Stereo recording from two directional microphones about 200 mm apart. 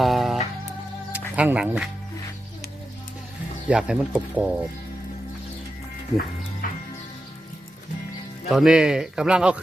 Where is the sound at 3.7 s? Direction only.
5° right (ahead or behind).